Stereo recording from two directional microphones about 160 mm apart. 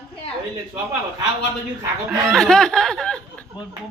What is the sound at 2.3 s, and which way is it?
Speech, 5° left (ahead or behind).